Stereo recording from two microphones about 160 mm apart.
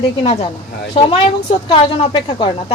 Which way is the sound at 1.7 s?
35° left (ahead or behind).